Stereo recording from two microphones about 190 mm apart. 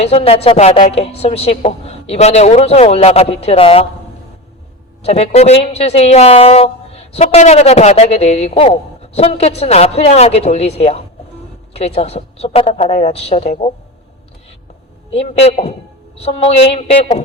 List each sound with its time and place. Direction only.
0.0 s a woman's voice: 35° left (ahead or behind)
5.0 s a woman's voice: 35° left (ahead or behind)
15.1 s a woman's voice: 35° left (ahead or behind)